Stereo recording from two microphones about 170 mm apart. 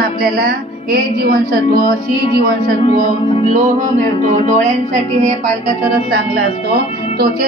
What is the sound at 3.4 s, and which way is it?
Speech, 45° right (ahead or behind).